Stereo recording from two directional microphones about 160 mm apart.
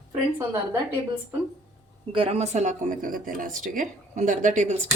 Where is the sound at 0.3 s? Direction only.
15° right (ahead or behind).